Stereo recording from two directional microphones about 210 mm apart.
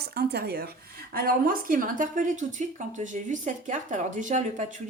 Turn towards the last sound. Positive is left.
turn(degrees=-35)  # may be behind; listen again after turning